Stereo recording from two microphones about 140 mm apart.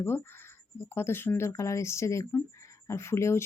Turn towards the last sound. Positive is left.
turn(degrees=20)  # may be behind; listen again after turning